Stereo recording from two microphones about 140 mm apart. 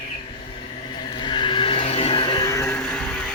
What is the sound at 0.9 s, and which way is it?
Vehicle, 35° left (ahead or behind).